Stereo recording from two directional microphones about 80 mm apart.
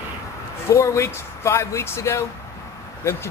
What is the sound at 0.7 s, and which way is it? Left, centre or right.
Speech, left.